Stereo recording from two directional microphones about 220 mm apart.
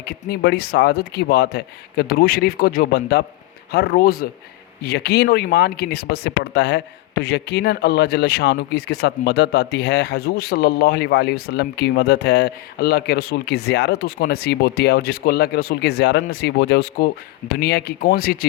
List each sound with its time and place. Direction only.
0.0 s speech: 45° left (ahead or behind)